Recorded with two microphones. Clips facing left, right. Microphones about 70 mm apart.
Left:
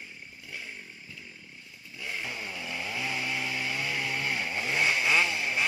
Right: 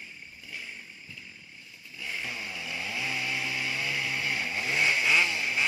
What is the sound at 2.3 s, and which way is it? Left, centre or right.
Chainsaw, left.